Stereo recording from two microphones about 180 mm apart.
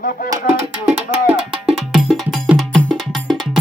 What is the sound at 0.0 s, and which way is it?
Music, 50° left (ahead or behind).